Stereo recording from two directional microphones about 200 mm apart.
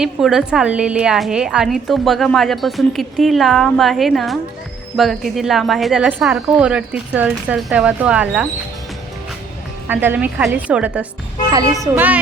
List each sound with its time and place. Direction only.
0.0 s a woman's voice: 5° right (ahead or behind)
9.9 s a woman's voice: 10° right (ahead or behind)